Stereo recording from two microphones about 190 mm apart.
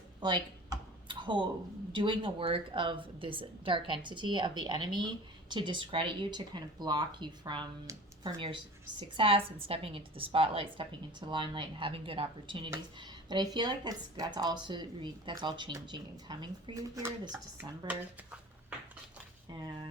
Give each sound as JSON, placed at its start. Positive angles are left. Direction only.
{"t": 0.2, "sound": "computer keyboard", "side_deg": -25}
{"t": 1.9, "sound": "a woman's voice", "side_deg": -25}